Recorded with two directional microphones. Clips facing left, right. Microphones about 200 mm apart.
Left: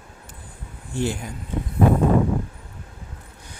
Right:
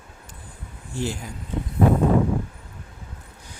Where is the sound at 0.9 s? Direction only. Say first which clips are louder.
Left 3 dB; 60° left (ahead or behind).